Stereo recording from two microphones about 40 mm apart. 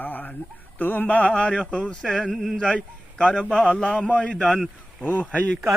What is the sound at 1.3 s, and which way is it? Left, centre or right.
Speech, left.